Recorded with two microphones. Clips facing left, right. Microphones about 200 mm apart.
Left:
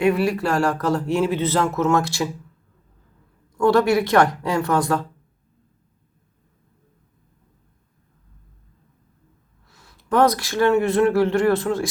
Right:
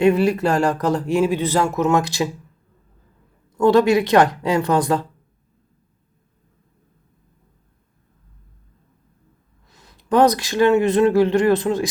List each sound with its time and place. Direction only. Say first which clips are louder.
0.0 s speech: right 3 dB; 25° right (ahead or behind)
3.6 s a woman's voice: right 2 dB; 20° right (ahead or behind)
9.6 s speech: right 3 dB; 20° right (ahead or behind)